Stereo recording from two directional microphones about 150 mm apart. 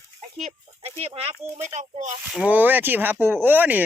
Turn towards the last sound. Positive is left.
turn(degrees=-10)  # may be behind; listen again after turning